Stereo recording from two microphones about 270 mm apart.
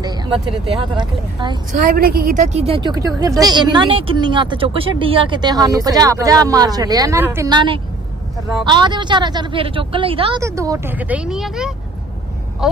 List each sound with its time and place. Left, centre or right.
0.0 s a woman's voice: centre
1.7 s a woman's voice: right; by 11.7 s centre